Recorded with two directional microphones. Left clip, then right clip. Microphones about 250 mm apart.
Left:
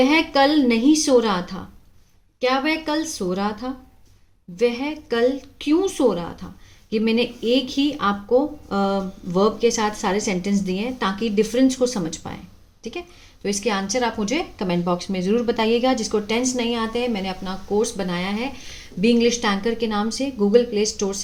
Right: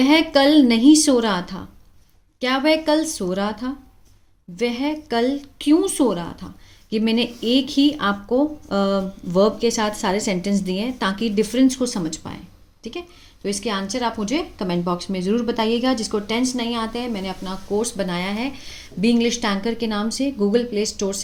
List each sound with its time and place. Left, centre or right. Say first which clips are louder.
0.0 s speech: right 1 dB; right